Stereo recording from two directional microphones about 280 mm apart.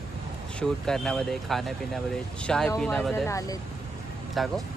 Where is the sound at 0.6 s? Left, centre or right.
Centre.